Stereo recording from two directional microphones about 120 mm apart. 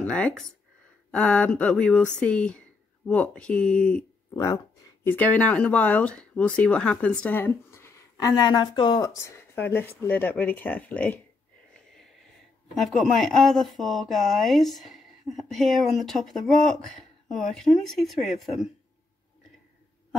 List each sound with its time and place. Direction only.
0.0 s speech: 5° left (ahead or behind)
4.3 s speech: 25° left (ahead or behind)
5.0 s speech: 15° left (ahead or behind)
8.4 s speech: 35° left (ahead or behind)
9.0 s speech: 25° left (ahead or behind)
11.9 s a sound: centre (ahead or behind)
12.7 s speech: centre (ahead or behind)